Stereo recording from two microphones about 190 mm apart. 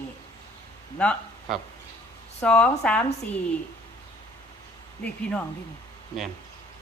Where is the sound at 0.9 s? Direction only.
Centre (ahead or behind).